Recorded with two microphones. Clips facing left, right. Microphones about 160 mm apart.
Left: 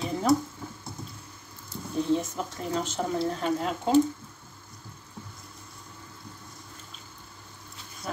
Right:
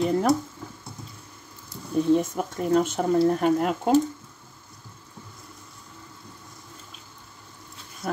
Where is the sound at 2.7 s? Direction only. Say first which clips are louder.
Right 8 dB; 55° right (ahead or behind).